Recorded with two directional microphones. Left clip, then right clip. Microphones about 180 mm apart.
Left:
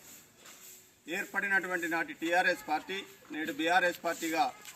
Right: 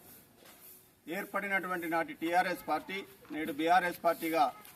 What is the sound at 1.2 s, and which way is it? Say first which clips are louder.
Speech: left 3 dB; 15° right (ahead or behind).